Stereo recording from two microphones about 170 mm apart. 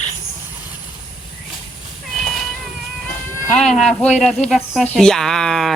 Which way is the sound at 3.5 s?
Centre (ahead or behind).